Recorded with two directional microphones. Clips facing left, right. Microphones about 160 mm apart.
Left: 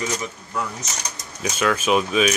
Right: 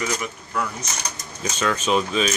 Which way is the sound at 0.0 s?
25° left (ahead or behind).